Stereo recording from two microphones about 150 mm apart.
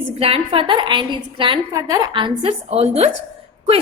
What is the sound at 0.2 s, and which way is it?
A woman's voice, 40° right (ahead or behind).